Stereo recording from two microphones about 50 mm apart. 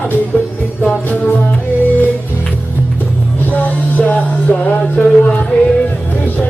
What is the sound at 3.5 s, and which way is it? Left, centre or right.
Music, left.